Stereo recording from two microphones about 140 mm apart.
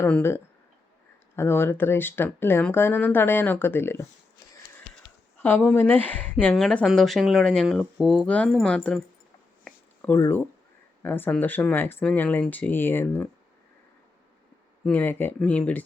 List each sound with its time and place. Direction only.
0.0 s speech: 15° left (ahead or behind)
5.4 s speech: 15° left (ahead or behind)
9.6 s a sound: 10° left (ahead or behind)
10.2 s speech: 20° left (ahead or behind)
14.8 s speech: 15° left (ahead or behind)